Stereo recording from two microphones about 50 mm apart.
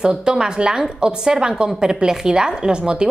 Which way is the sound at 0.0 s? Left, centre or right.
Centre.